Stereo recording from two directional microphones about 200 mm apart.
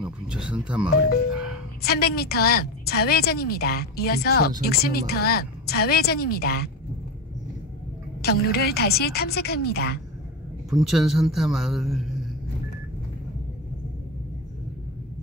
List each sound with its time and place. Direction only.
0.0 s a man's voice: 5° right (ahead or behind)
1.9 s a woman's voice: 50° left (ahead or behind)
8.2 s a woman's voice: 50° left (ahead or behind)
10.7 s a man's voice: centre (ahead or behind)